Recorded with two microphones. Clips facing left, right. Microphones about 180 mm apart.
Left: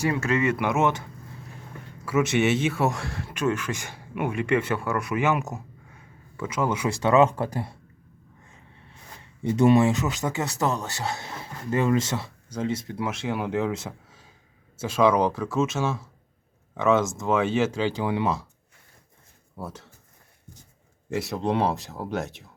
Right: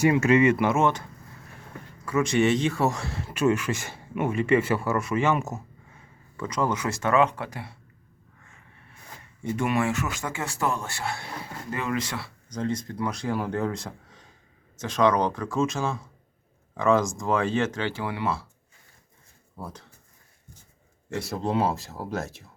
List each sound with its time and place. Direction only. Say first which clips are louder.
0.0 s speech: right 5 dB; 15° right (ahead or behind)
0.6 s speech: right 1 dB; 20° left (ahead or behind)
2.0 s speech: even; 5° left (ahead or behind)
7.3 s speech: left 6 dB; 40° left (ahead or behind)
9.4 s speech: left 7 dB; 25° left (ahead or behind)
12.5 s speech: left 1 dB; 5° left (ahead or behind)
19.5 s speech: left 2 dB; 5° left (ahead or behind)
21.2 s speech: left 1 dB; centre (ahead or behind)